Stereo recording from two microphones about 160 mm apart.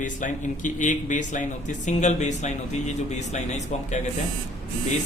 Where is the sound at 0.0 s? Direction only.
50° left (ahead or behind).